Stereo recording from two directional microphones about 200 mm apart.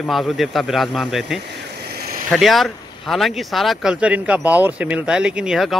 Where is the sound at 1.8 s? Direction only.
50° right (ahead or behind).